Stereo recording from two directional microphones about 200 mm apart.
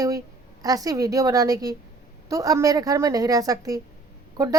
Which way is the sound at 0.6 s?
20° right (ahead or behind).